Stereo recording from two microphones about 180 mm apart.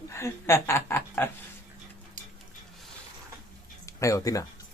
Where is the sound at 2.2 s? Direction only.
45° right (ahead or behind).